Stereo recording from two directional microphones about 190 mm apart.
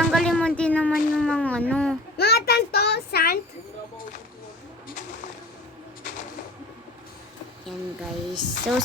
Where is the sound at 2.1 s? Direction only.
55° left (ahead or behind).